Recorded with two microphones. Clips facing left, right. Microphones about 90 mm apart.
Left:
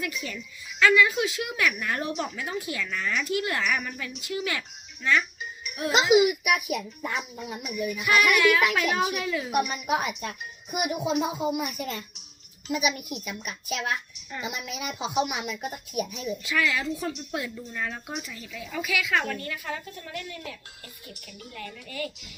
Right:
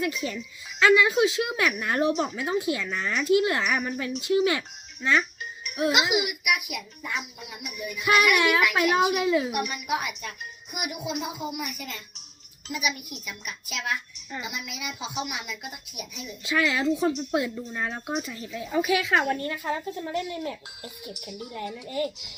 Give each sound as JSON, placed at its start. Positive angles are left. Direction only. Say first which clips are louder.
{"t": 0.0, "sound": "a child's voice", "louder": "right 5 dB", "side_deg": -30}
{"t": 3.8, "sound": "speech", "louder": "right 8 dB", "side_deg": -35}
{"t": 5.9, "sound": "a woman's voice", "louder": "left 8 dB", "side_deg": 35}
{"t": 8.4, "sound": "a child's voice", "louder": "even", "side_deg": -25}
{"t": 9.5, "sound": "a woman's voice", "louder": "left 3 dB", "side_deg": 35}
{"t": 16.4, "sound": "speech", "louder": "right 4 dB", "side_deg": -25}
{"t": 21.0, "sound": "speech", "louder": "right 7 dB", "side_deg": -15}